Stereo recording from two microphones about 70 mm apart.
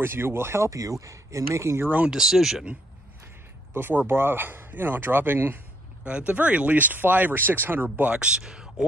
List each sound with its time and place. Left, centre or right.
0.0 s speech: right
0.7 s speech: right
2.0 s speech: centre
3.7 s speech: right
6.0 s speech: centre